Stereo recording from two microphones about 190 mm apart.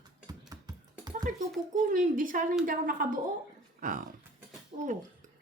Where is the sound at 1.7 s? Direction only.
45° right (ahead or behind).